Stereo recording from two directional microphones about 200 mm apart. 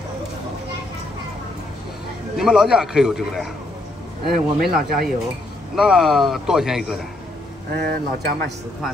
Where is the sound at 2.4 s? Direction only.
5° right (ahead or behind).